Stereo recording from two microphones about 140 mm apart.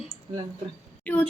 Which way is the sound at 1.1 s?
10° left (ahead or behind).